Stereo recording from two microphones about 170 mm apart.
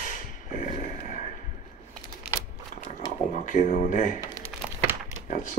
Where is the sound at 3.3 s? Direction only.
50° left (ahead or behind).